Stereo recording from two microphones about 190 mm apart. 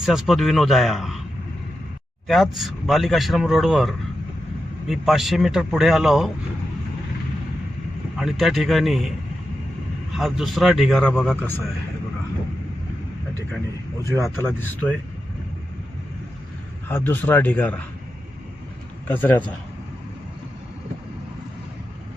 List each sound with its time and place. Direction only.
0.0 s speech: centre (ahead or behind)
2.2 s speech: centre (ahead or behind)
8.1 s speech: centre (ahead or behind)
10.2 s speech: centre (ahead or behind)
14.4 s speech: 10° left (ahead or behind)
16.9 s speech: 10° left (ahead or behind)
19.0 s a man's voice: 10° left (ahead or behind)